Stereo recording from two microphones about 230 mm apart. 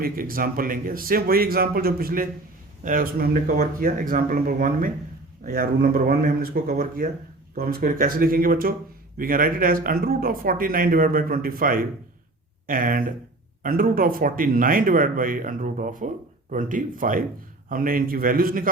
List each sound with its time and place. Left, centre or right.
0.0 s speech: right